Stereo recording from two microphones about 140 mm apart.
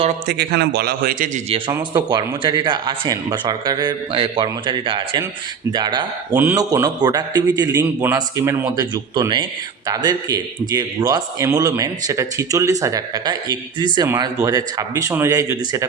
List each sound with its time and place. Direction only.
0.9 s a man's voice: 90° right
1.5 s speech: 40° right (ahead or behind); by 15.9 s 25° right (ahead or behind)